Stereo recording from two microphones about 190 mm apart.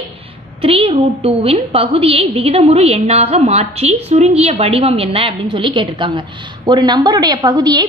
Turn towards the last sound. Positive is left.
turn(degrees=-20)  # may be behind; listen again after turning